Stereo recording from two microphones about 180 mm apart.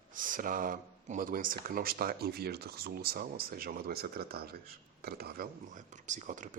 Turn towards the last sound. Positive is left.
turn(degrees=-45)  # may be behind; listen again after turning